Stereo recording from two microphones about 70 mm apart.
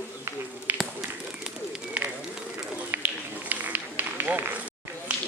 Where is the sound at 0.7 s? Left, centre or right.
Right.